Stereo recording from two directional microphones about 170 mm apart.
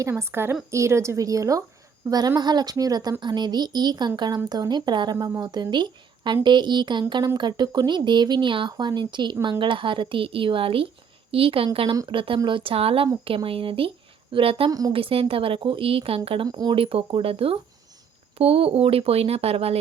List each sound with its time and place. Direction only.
0.0 s a woman's voice: 15° right (ahead or behind); by 14.7 s 35° right (ahead or behind)
14.7 s speech: 20° right (ahead or behind)
14.9 s a woman's voice: 35° right (ahead or behind)